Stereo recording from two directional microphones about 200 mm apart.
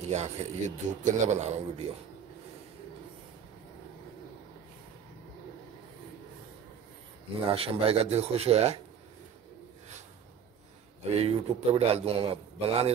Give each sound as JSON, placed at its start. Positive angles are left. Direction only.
{"t": 0.1, "sound": "a man's voice", "side_deg": -35}
{"t": 7.4, "sound": "a man's voice", "side_deg": -30}
{"t": 11.1, "sound": "a man's voice", "side_deg": -30}